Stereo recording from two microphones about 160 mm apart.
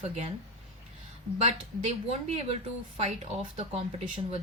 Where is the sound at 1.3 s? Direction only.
40° right (ahead or behind).